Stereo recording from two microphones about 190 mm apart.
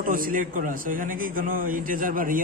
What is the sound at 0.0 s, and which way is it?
A man's voice, 45° right (ahead or behind).